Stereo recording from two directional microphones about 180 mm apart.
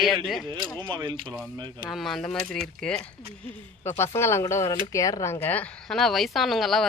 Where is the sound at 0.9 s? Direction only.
25° right (ahead or behind).